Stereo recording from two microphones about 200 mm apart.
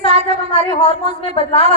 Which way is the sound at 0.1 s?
30° right (ahead or behind).